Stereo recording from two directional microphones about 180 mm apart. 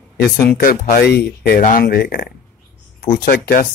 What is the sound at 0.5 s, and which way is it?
Speech, 55° left (ahead or behind).